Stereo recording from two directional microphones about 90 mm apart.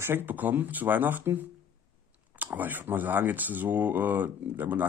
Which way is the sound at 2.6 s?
20° right (ahead or behind).